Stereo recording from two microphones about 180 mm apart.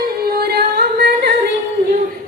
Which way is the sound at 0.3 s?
60° right (ahead or behind).